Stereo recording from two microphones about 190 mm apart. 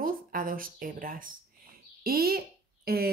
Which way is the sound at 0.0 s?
50° right (ahead or behind).